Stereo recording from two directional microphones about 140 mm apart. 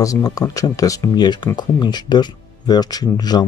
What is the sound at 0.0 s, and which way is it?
Speech, 25° left (ahead or behind).